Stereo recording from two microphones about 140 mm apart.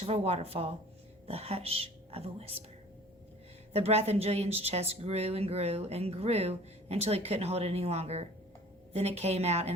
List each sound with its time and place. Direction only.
0.0 s speech: 45° right (ahead or behind)
3.7 s speech: 45° right (ahead or behind)